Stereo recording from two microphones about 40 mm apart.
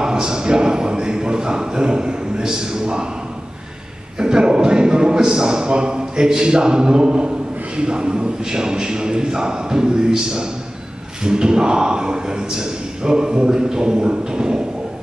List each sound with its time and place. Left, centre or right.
0.0 s a man's voice: centre
4.2 s a man's voice: centre